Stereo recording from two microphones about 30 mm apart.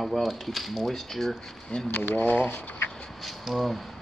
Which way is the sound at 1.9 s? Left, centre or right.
Left.